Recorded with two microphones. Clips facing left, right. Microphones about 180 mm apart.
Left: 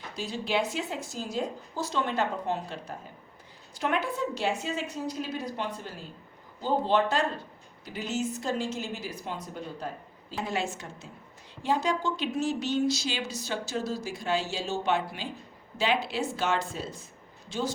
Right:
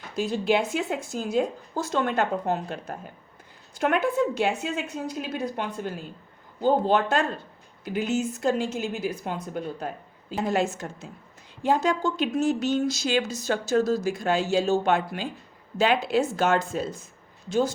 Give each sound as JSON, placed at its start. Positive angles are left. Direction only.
{"t": 0.2, "sound": "a woman's voice", "side_deg": -50}